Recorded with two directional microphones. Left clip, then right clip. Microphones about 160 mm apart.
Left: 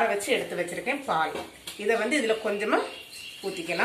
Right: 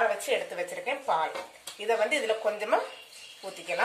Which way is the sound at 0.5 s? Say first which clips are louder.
Left 3 dB; 40° right (ahead or behind).